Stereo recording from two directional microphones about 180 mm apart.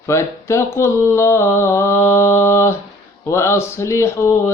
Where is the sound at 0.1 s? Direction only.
15° left (ahead or behind).